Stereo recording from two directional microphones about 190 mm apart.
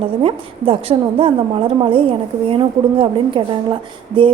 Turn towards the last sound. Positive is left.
turn(degrees=-30)  # may be behind; listen again after turning